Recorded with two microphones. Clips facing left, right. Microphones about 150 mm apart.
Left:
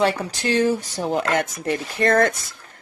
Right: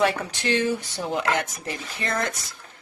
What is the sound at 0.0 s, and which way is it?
Speech, 35° left (ahead or behind).